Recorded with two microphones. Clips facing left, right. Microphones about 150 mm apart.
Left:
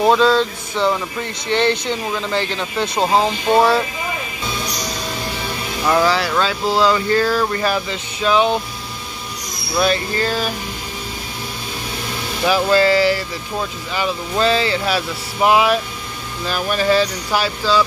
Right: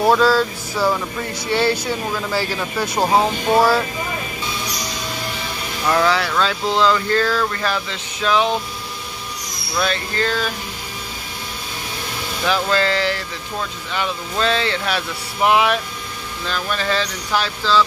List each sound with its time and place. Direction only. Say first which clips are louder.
0.2 s a sound: left 1 dB; 25° left (ahead or behind)
1.5 s speech: left 1 dB; 5° right (ahead or behind)
5.9 s speech: left 1 dB; 5° left (ahead or behind)
9.8 s speech: left 3 dB; 10° left (ahead or behind)
12.4 s speech: left 5 dB; 10° left (ahead or behind)